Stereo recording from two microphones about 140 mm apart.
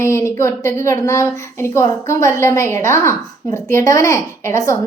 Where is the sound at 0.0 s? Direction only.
20° left (ahead or behind).